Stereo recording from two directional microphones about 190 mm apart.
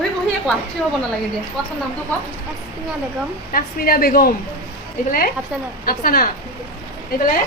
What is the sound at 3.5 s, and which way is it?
A woman's voice, 50° left (ahead or behind).